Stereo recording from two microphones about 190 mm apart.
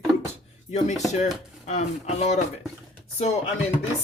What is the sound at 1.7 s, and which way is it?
Speech, 35° left (ahead or behind).